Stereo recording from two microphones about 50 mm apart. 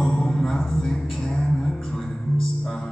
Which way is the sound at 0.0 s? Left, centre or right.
Centre.